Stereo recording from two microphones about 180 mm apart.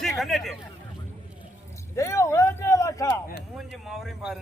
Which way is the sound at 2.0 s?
15° left (ahead or behind).